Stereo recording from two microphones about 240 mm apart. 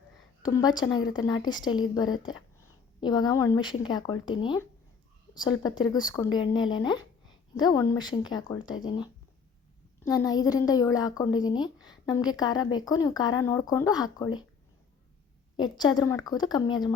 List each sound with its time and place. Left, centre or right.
0.4 s speech: centre
10.1 s speech: centre
15.5 s speech: centre